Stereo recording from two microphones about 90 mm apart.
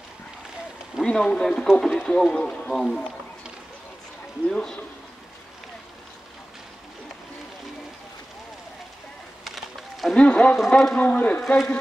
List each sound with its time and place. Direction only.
1.0 s speech: 5° left (ahead or behind)
4.5 s speech: 10° left (ahead or behind)
9.4 s a sound: centre (ahead or behind)
10.1 s speech: 10° left (ahead or behind)
11.0 s speech: 15° left (ahead or behind)
11.5 s speech: 5° left (ahead or behind)